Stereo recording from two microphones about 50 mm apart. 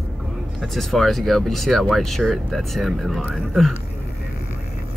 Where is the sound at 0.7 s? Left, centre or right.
Centre.